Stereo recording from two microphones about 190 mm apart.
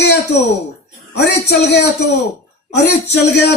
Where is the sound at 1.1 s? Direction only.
60° left (ahead or behind).